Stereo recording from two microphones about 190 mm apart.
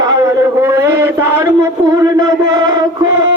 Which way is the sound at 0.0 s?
15° right (ahead or behind).